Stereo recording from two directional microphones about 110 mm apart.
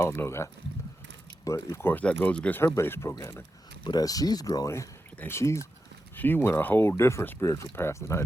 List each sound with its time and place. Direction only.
0.0 s speech: 20° left (ahead or behind)
1.7 s speech: 20° left (ahead or behind)
3.8 s speech: 35° left (ahead or behind)